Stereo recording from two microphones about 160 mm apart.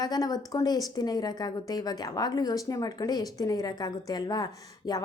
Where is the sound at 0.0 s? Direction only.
25° left (ahead or behind).